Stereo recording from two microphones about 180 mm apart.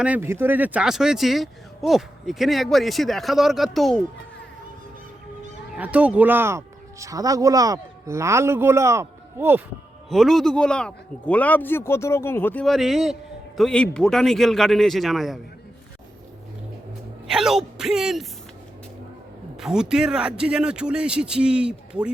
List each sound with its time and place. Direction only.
0.0 s speech: 10° right (ahead or behind)
5.7 s speech: 5° right (ahead or behind)
10.1 s speech: centre (ahead or behind)
17.2 s speech: 5° right (ahead or behind)
19.5 s speech: 5° right (ahead or behind)